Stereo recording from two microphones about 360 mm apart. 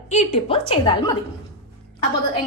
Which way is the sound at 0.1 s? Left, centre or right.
Centre.